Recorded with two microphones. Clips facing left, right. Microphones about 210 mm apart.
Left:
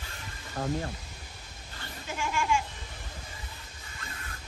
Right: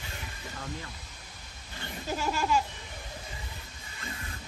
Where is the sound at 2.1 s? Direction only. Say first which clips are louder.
Right 1 dB; 40° right (ahead or behind).